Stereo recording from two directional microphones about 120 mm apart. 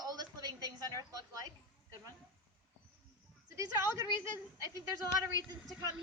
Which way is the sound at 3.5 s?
25° right (ahead or behind).